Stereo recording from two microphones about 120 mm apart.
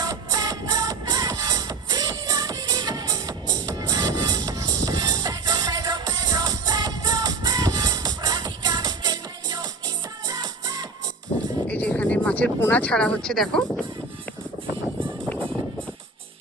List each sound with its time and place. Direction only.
0.0 s music: 30° right (ahead or behind)
11.3 s music: 60° left (ahead or behind)
11.7 s speech: 10° left (ahead or behind)